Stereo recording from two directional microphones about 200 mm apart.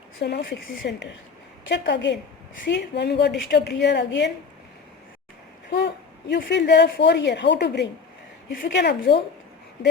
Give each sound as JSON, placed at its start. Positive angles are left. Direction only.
{"t": 0.2, "sound": "speech", "side_deg": 55}
{"t": 5.7, "sound": "speech", "side_deg": 55}